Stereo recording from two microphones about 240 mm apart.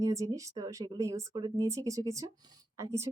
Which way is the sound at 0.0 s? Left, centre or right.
Centre.